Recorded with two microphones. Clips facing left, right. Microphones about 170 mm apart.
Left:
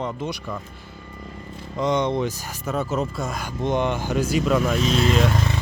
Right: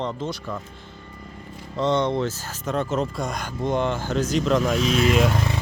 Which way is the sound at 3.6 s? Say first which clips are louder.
Left 1 dB; 20° left (ahead or behind).